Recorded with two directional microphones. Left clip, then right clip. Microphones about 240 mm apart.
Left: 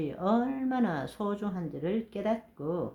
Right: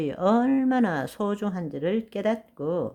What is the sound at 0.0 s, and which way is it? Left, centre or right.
Speech, right.